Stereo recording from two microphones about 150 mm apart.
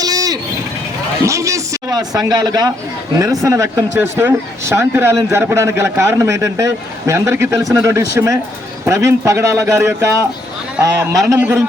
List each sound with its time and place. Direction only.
0.0 s vehicle: 25° right (ahead or behind)
1.2 s a man's voice: 20° right (ahead or behind)